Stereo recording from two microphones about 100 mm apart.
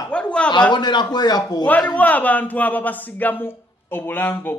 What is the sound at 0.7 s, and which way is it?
Speech, 45° left (ahead or behind).